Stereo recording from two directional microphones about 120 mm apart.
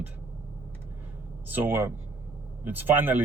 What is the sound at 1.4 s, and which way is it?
Speech, 15° right (ahead or behind).